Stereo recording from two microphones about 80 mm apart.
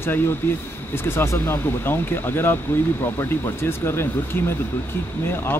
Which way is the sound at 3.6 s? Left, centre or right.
Left.